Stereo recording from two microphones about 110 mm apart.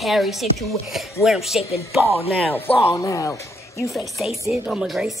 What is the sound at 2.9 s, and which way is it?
Speech, 35° left (ahead or behind).